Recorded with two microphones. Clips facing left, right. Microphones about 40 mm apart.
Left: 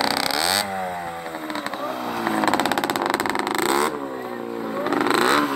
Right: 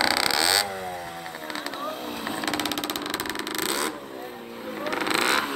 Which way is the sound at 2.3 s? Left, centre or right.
Left.